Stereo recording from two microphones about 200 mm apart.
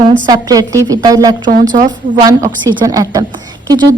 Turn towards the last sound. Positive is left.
turn(degrees=-20)  # may be behind; listen again after turning